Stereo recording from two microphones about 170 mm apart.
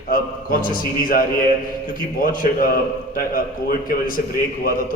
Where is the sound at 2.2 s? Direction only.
55° left (ahead or behind).